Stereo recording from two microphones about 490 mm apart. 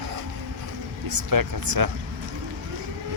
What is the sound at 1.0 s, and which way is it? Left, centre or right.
Vehicle, right.